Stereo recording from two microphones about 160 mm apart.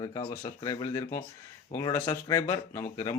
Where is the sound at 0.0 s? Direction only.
30° left (ahead or behind).